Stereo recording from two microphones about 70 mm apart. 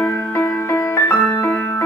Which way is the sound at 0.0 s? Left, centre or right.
Left.